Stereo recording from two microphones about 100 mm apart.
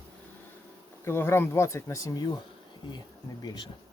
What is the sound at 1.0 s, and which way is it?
Speech, 25° left (ahead or behind).